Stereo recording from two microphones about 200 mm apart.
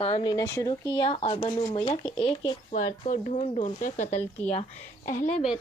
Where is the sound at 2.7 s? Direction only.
35° left (ahead or behind).